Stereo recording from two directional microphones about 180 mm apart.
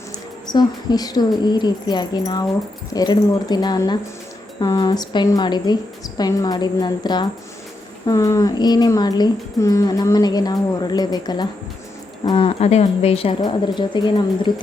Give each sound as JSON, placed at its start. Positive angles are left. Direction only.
{"t": 0.4, "sound": "speech", "side_deg": 20}